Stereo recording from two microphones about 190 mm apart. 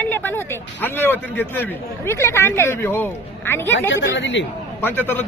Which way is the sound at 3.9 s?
70° left (ahead or behind).